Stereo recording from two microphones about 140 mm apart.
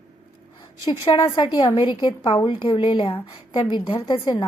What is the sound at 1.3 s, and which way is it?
A woman's voice, 35° left (ahead or behind).